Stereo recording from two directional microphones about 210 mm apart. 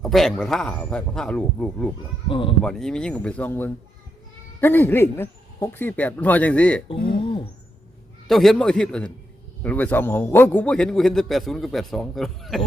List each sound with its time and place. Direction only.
0.0 s a man's voice: centre (ahead or behind)
2.3 s speech: 25° left (ahead or behind)
2.6 s a man's voice: 5° left (ahead or behind)
6.8 s speech: 25° left (ahead or behind)
8.3 s a man's voice: centre (ahead or behind)